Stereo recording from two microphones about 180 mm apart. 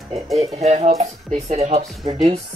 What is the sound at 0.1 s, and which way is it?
Speech, 35° right (ahead or behind).